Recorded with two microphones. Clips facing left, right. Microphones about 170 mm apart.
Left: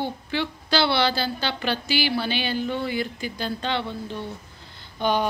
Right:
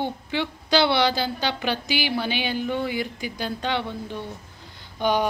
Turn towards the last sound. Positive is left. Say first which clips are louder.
# right 1 dB
turn(degrees=-15)  # may be behind; listen again after turning